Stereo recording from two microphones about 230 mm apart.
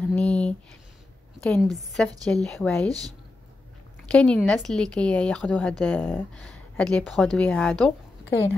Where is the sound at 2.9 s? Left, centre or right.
Centre.